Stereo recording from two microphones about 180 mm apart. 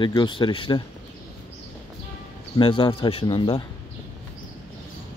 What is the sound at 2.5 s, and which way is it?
Speech, 30° left (ahead or behind).